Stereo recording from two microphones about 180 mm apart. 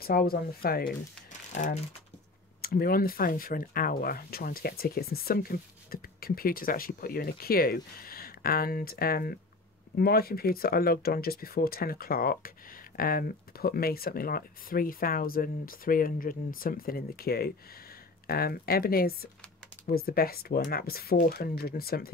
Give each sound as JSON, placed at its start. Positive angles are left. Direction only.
{"t": 0.0, "sound": "speech", "side_deg": 55}
{"t": 1.5, "sound": "speech", "side_deg": 40}
{"t": 2.6, "sound": "speech", "side_deg": 55}